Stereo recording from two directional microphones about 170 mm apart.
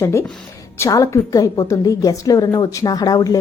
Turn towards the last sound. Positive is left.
turn(degrees=20)  # may be behind; listen again after turning